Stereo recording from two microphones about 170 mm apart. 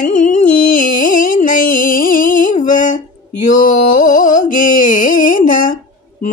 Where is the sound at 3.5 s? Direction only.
55° left (ahead or behind).